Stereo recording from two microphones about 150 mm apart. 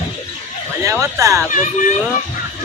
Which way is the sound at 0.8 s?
20° right (ahead or behind).